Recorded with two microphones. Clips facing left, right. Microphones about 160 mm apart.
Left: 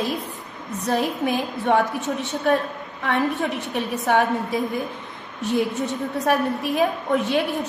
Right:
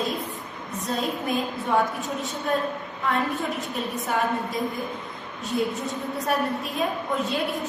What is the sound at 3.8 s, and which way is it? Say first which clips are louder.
Speech: left 8 dB; 75° left (ahead or behind).